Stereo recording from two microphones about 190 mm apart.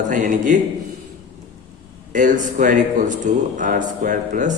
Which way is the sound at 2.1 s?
40° right (ahead or behind).